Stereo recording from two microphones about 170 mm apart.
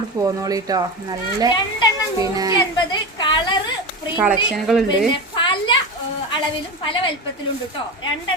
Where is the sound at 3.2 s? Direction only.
25° left (ahead or behind).